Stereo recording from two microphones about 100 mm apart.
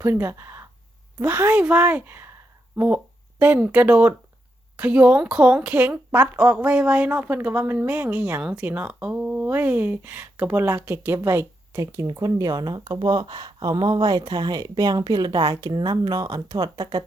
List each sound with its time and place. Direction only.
0.0 s speech: 25° right (ahead or behind); by 17.0 s 45° right (ahead or behind)